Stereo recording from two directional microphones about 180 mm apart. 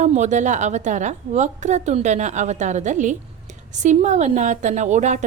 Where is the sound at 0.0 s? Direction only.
40° right (ahead or behind).